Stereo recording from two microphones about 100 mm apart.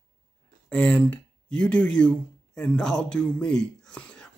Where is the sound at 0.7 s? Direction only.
10° left (ahead or behind).